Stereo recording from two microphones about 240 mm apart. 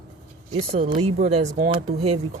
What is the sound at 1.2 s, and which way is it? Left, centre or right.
Speech, right.